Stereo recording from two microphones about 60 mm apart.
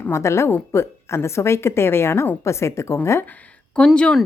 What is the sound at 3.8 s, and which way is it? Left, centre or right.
Speech, centre.